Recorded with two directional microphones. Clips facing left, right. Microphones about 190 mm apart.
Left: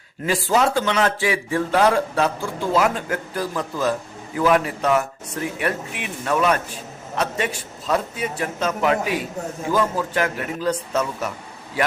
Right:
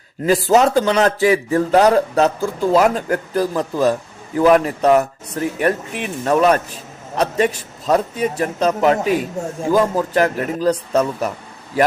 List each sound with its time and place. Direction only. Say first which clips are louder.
0.3 s speech: right 6 dB; 40° right (ahead or behind)